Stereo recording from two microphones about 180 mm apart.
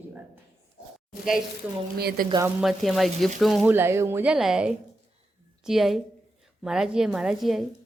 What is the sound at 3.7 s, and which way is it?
Speech, 15° right (ahead or behind).